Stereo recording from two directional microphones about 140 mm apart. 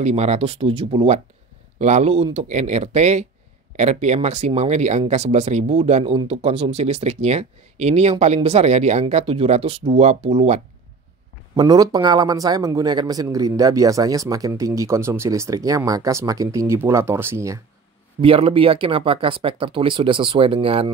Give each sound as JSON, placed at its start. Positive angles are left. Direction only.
{"t": 0.0, "sound": "speech", "side_deg": -50}
{"t": 11.5, "sound": "a man's voice", "side_deg": -30}
{"t": 18.2, "sound": "speech", "side_deg": -40}